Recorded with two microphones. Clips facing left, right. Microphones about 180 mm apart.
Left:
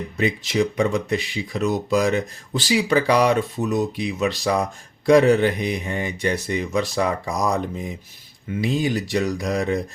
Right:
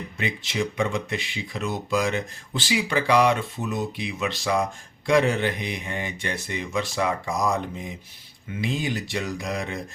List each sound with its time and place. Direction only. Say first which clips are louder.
0.2 s speech: left 7 dB; 40° left (ahead or behind)
8.6 s speech: left 5 dB; 40° left (ahead or behind)